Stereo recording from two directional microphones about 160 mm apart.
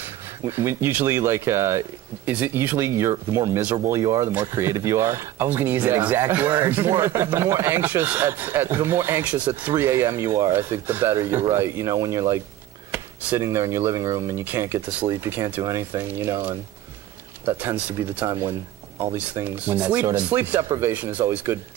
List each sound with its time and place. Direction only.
0.4 s speech: 15° right (ahead or behind)